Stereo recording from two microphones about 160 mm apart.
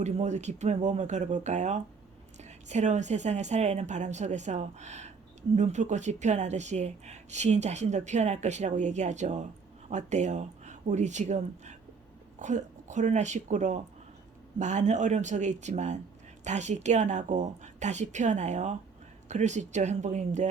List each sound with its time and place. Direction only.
0.0 s speech: 45° right (ahead or behind)